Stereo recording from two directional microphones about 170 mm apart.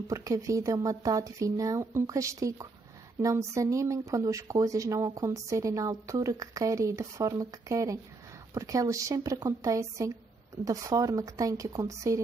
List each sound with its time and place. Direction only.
0.1 s speech: 20° right (ahead or behind)